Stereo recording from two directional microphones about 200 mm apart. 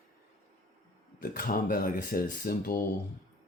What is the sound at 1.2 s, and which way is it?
Speech, 45° left (ahead or behind).